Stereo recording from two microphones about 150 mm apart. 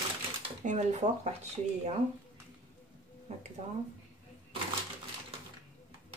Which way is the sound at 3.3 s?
50° right (ahead or behind).